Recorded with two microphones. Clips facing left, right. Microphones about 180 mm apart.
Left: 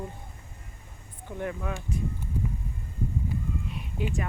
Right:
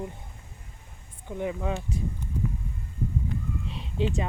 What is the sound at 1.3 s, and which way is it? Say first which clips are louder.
Speech: right 3 dB; 15° right (ahead or behind).